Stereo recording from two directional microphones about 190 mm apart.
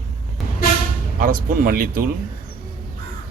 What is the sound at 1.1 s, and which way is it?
Speech, 50° right (ahead or behind).